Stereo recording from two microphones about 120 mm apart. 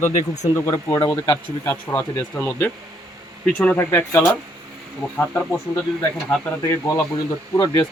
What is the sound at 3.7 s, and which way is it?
Speech, 20° left (ahead or behind).